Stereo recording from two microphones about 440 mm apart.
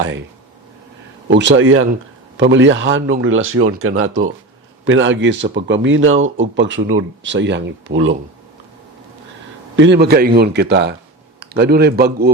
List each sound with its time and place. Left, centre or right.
1.3 s speech: right
9.7 s a man's voice: right